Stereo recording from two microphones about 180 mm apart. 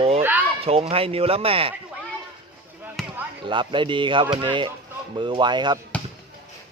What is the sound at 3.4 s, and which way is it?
Speech, 25° right (ahead or behind).